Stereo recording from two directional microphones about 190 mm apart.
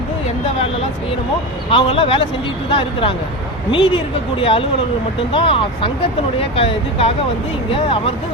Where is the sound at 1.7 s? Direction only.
30° left (ahead or behind).